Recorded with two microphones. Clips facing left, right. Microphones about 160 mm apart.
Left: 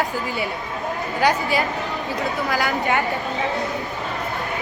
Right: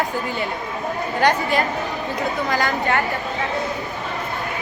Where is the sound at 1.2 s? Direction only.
5° left (ahead or behind).